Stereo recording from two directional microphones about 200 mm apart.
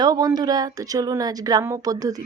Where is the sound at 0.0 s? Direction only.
20° right (ahead or behind).